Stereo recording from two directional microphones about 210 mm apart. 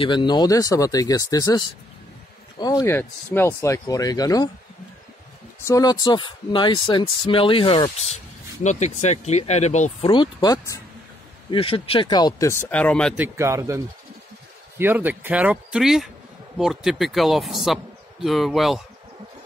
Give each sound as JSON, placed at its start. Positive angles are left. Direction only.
{"t": 0.0, "sound": "speech", "side_deg": 20}
{"t": 5.7, "sound": "speech", "side_deg": 15}
{"t": 10.0, "sound": "speech", "side_deg": 25}
{"t": 13.2, "sound": "speech", "side_deg": -15}